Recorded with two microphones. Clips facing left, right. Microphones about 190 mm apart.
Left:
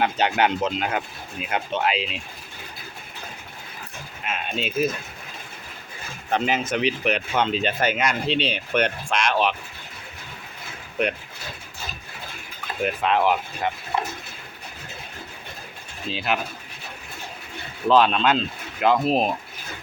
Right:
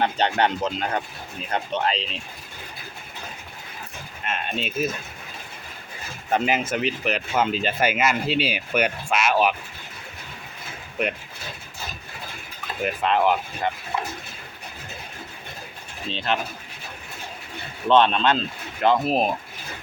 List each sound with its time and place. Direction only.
0.0 s speech: 5° left (ahead or behind)
4.2 s speech: centre (ahead or behind)
6.3 s speech: 5° right (ahead or behind)
12.8 s speech: centre (ahead or behind)
16.0 s speech: 5° left (ahead or behind)
17.8 s speech: 5° left (ahead or behind)